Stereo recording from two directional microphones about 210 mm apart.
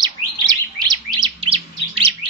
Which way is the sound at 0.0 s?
20° right (ahead or behind).